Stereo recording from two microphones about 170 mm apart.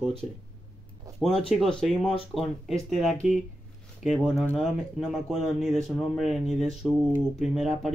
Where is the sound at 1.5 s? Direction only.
5° left (ahead or behind).